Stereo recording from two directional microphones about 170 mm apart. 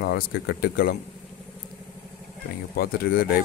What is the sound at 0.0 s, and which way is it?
Speech, 65° left (ahead or behind).